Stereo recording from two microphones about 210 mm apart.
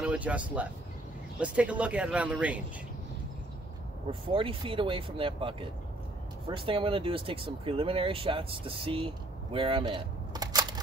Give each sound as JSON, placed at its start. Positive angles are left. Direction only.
{"t": 0.0, "sound": "speech", "side_deg": -5}
{"t": 4.1, "sound": "speech", "side_deg": -25}